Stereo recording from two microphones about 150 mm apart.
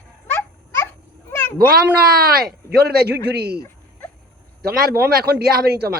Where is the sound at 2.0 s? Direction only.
90° right.